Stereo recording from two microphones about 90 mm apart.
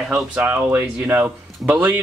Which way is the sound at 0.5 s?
25° right (ahead or behind).